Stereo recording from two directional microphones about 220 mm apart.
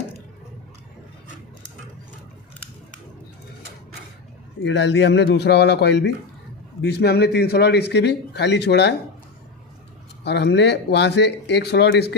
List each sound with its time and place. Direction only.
4.6 s speech: 55° left (ahead or behind)
10.2 s speech: 50° left (ahead or behind)